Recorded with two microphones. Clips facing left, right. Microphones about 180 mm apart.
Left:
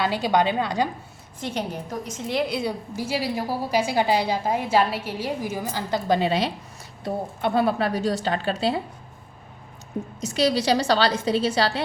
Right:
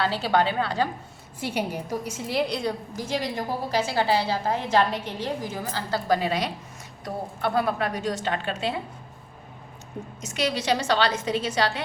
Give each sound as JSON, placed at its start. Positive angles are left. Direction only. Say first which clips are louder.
{"t": 0.0, "sound": "a woman's voice", "louder": "left 2 dB", "side_deg": 15}
{"t": 1.4, "sound": "a woman's voice", "louder": "right 1 dB", "side_deg": -10}
{"t": 10.2, "sound": "a woman's voice", "louder": "left 5 dB", "side_deg": 35}